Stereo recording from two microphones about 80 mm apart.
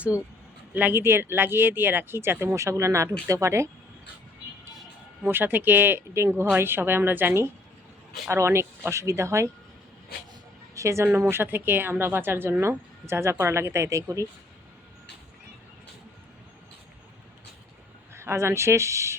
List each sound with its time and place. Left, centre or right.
0.7 s speech: right
5.2 s speech: right
8.3 s speech: right
10.8 s speech: right
18.1 s speech: right